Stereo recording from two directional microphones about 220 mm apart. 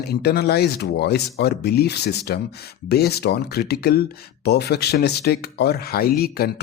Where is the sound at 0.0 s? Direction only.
45° left (ahead or behind).